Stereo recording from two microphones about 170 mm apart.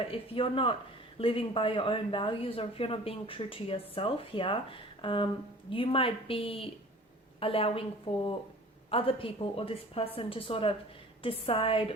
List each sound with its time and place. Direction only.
0.0 s speech: 30° left (ahead or behind)